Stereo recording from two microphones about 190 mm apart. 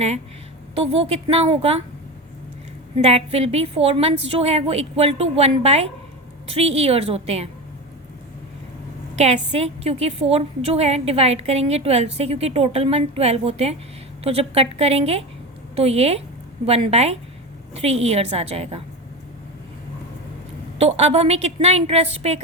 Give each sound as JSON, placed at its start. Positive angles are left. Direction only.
{"t": 0.8, "sound": "a woman's voice", "side_deg": -30}
{"t": 3.0, "sound": "a woman's voice", "side_deg": -35}
{"t": 9.1, "sound": "a woman's voice", "side_deg": -35}
{"t": 20.7, "sound": "a woman's voice", "side_deg": -35}